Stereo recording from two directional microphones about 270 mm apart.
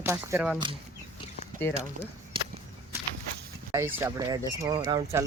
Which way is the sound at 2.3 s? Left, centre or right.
Centre.